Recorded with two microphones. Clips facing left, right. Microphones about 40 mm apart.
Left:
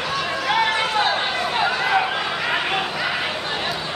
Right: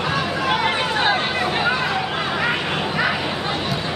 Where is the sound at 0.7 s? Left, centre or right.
Centre.